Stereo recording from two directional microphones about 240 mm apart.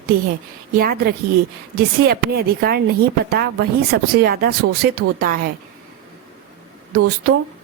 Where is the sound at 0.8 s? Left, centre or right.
Right.